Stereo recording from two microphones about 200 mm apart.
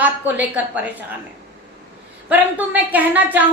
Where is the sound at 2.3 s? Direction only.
10° right (ahead or behind).